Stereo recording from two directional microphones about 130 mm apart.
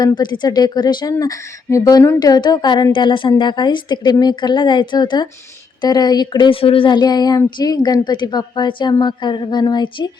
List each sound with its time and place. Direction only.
0.0 s speech: 35° left (ahead or behind)